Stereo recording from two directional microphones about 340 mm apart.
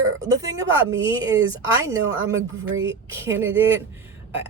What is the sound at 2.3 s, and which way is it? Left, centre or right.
Speech, right.